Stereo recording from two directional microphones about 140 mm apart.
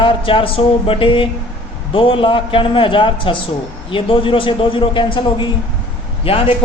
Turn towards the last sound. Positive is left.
turn(degrees=40)  # may be behind; listen again after turning